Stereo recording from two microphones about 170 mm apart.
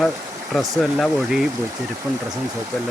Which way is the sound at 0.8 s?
Centre (ahead or behind).